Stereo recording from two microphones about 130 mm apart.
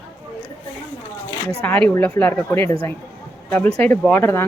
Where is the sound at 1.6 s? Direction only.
15° left (ahead or behind).